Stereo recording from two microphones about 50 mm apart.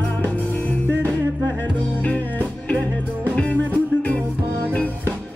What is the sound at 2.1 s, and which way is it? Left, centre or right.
Music, left.